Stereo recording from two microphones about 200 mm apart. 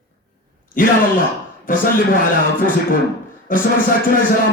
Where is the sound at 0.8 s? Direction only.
45° left (ahead or behind).